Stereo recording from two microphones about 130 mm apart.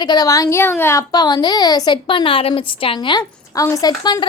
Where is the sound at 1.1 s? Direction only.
35° left (ahead or behind).